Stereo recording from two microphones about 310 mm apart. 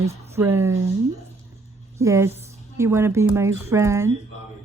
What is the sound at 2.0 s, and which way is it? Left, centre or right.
Speech, centre.